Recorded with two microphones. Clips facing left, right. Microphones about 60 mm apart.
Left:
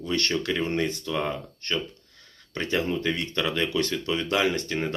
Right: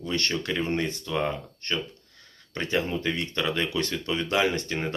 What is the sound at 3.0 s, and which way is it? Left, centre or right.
Speech, right.